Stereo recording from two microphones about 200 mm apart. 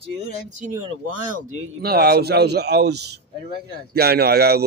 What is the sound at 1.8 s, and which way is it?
A man's voice, 50° right (ahead or behind).